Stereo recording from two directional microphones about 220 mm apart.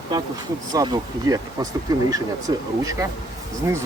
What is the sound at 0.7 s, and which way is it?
Speech, 15° right (ahead or behind).